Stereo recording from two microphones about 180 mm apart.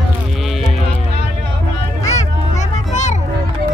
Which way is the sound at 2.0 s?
40° left (ahead or behind).